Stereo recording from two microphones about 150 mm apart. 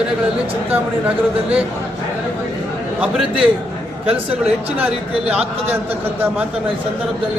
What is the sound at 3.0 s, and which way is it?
Speech, 10° right (ahead or behind).